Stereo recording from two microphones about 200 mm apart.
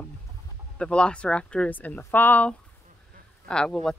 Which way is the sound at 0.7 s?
5° left (ahead or behind).